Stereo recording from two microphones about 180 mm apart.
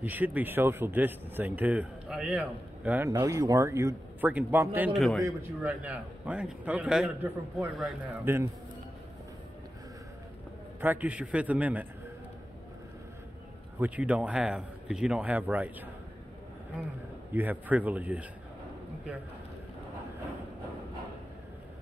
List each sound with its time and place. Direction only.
0.0 s speech: 10° right (ahead or behind)
3.1 s speech: 20° right (ahead or behind); by 5.2 s centre (ahead or behind)
5.2 s speech: 10° right (ahead or behind)
8.3 s speech: 15° right (ahead or behind)
10.8 s speech: 10° right (ahead or behind)
13.7 s speech: 10° right (ahead or behind)
17.3 s speech: 10° right (ahead or behind)